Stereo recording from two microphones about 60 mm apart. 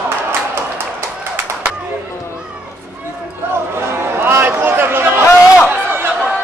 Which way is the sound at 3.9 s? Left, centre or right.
Right.